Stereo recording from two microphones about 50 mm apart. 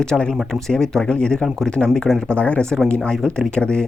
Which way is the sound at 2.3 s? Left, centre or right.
Left.